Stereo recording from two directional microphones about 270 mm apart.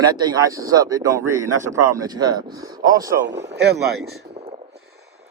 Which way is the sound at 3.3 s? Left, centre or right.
Right.